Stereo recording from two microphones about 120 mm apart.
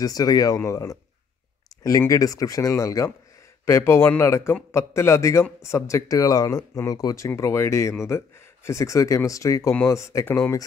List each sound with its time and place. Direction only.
0.0 s speech: 30° left (ahead or behind)